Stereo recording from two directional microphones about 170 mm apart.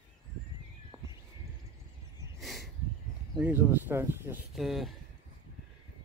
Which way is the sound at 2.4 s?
Centre (ahead or behind).